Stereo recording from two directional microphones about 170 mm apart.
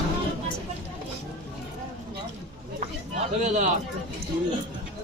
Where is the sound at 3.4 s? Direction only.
45° right (ahead or behind).